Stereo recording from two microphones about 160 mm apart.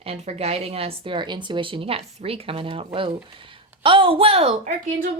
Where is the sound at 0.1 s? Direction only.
40° right (ahead or behind).